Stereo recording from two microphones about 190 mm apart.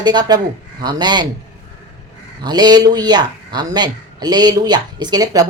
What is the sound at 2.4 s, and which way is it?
Speech, 20° right (ahead or behind).